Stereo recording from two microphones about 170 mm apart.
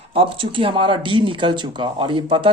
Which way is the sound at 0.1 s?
30° right (ahead or behind).